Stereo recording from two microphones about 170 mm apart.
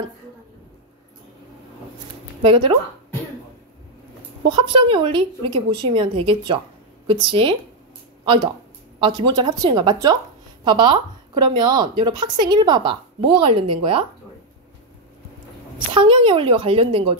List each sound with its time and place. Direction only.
2.4 s a woman's voice: 30° right (ahead or behind)
4.5 s a woman's voice: 30° right (ahead or behind)
9.0 s a woman's voice: 25° right (ahead or behind)
15.9 s a woman's voice: 30° right (ahead or behind)